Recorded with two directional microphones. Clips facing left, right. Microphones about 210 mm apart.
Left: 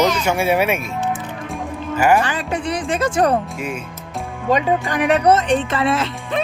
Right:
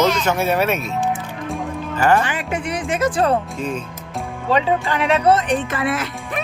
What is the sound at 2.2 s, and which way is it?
Speech, 35° left (ahead or behind).